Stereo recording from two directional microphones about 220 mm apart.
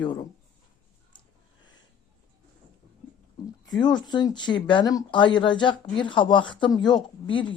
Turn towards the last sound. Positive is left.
turn(degrees=20)  # may be behind; listen again after turning